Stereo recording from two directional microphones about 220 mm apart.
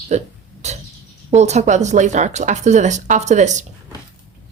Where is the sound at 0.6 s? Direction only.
30° right (ahead or behind).